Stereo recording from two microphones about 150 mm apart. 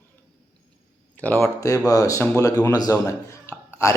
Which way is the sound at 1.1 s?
10° left (ahead or behind).